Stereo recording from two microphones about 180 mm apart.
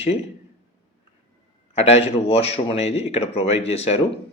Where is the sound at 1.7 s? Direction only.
35° left (ahead or behind).